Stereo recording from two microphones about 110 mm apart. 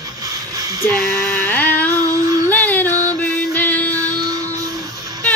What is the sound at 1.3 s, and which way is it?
Speech, 15° left (ahead or behind).